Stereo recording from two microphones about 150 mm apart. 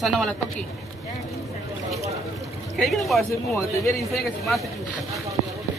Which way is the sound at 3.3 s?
20° left (ahead or behind).